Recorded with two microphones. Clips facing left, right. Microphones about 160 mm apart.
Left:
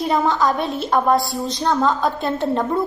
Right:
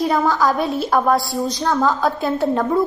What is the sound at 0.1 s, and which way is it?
A woman's voice, centre (ahead or behind).